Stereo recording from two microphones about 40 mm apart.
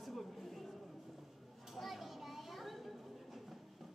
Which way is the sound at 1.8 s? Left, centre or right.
Centre.